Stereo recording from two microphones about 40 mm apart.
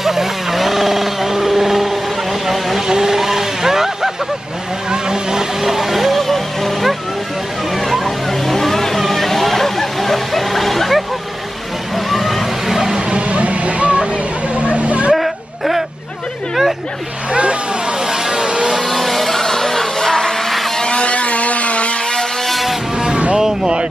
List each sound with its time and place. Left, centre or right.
0.0 s vehicle: centre
4.8 s speech: centre
7.7 s vehicle: centre
9.0 s a sound: centre
11.9 s vehicle: centre
13.0 s a sound: right
15.1 s a sound: centre
17.3 s vehicle: right
17.9 s vehicle: centre
18.7 s a sound: centre
20.8 s vehicle: left
22.5 s vehicle: centre
22.9 s vehicle: centre
23.3 s music: centre